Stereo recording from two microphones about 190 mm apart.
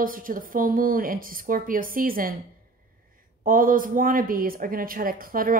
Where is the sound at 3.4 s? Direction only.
45° right (ahead or behind).